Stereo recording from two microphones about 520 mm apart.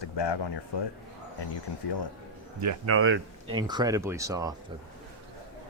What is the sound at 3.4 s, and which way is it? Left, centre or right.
Speech, centre.